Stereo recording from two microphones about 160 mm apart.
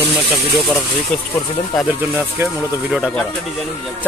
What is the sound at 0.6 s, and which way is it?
Speech, centre (ahead or behind).